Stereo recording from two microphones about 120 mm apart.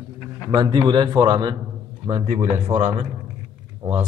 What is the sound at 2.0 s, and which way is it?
Speech, 50° right (ahead or behind).